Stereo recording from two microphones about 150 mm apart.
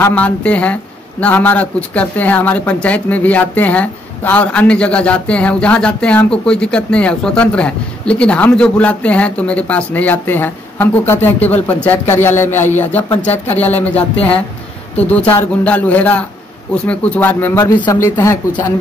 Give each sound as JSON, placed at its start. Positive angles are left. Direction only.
{"t": 0.0, "sound": "speech", "side_deg": 10}